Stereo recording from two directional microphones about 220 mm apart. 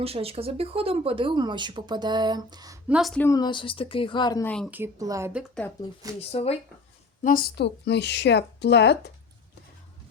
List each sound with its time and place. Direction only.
0.0 s speech: 25° right (ahead or behind)
2.9 s speech: centre (ahead or behind)
3.2 s speech: 20° left (ahead or behind)
4.7 s speech: 10° right (ahead or behind)
6.1 s speech: 25° left (ahead or behind)
7.3 s speech: 40° left (ahead or behind)